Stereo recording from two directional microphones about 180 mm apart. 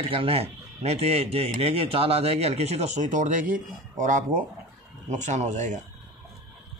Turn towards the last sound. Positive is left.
turn(degrees=-40)  # may be behind; listen again after turning